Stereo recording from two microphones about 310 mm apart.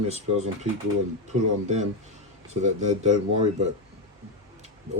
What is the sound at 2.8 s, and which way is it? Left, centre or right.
Speech, right.